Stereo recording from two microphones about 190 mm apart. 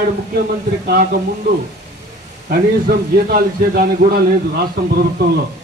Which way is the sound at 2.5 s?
50° right (ahead or behind).